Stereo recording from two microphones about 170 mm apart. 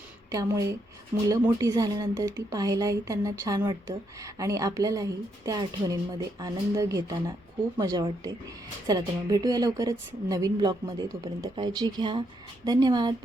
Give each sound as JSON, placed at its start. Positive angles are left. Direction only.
{"t": 0.3, "sound": "a woman's voice", "side_deg": -20}